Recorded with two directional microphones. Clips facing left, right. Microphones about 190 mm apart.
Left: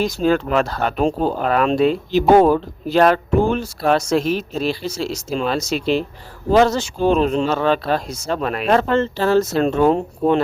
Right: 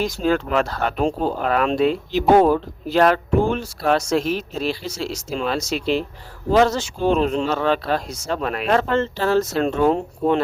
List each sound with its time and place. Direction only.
0.0 s speech: 35° left (ahead or behind)